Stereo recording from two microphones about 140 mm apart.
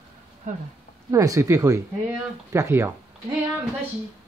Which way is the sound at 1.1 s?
20° right (ahead or behind).